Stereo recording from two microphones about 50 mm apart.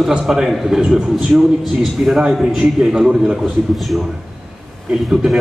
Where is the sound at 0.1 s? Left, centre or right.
Centre.